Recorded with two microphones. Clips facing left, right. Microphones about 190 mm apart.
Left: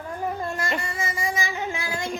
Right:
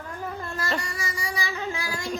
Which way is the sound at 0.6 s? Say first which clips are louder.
Left 2 dB; 25° left (ahead or behind).